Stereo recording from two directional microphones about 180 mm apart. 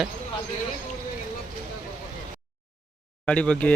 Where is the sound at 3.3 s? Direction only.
5° left (ahead or behind).